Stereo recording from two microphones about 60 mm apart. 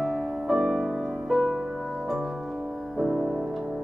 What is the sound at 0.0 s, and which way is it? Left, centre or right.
Music, centre.